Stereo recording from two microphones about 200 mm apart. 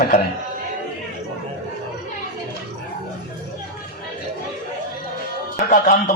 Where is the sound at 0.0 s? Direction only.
45° left (ahead or behind).